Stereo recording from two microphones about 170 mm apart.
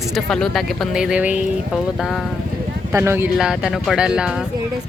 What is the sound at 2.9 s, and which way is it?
Speech, 15° right (ahead or behind).